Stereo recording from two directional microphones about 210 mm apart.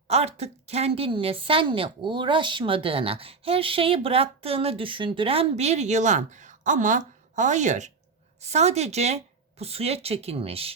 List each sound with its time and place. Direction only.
0.1 s a woman's voice: 30° right (ahead or behind)